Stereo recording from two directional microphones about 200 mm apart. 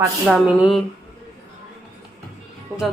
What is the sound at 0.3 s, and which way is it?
Speech, 5° right (ahead or behind).